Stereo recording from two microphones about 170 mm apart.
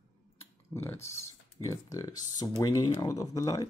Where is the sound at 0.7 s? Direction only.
15° left (ahead or behind).